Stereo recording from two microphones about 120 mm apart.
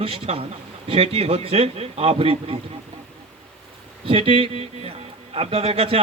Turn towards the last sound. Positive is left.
turn(degrees=-55)  # may be behind; listen again after turning